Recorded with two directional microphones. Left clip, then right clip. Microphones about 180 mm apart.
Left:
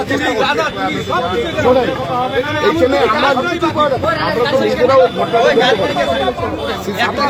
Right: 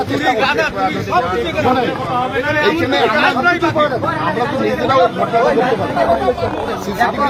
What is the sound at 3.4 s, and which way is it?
Speech, centre (ahead or behind).